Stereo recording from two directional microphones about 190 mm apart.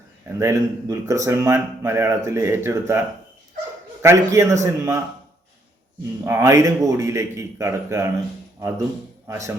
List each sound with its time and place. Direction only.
0.3 s a man's voice: 15° right (ahead or behind)
4.0 s a man's voice: 15° right (ahead or behind)
6.2 s a man's voice: 15° right (ahead or behind)
9.2 s speech: 15° right (ahead or behind)